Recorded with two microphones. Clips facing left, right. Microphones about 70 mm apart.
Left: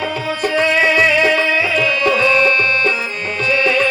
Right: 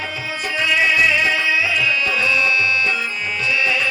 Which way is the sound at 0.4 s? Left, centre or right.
Left.